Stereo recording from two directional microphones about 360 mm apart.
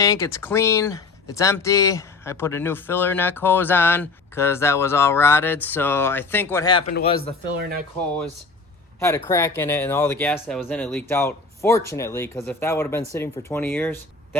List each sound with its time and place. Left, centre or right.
0.0 s speech: centre
9.0 s speech: centre